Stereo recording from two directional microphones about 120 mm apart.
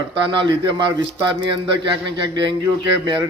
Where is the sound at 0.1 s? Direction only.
45° right (ahead or behind).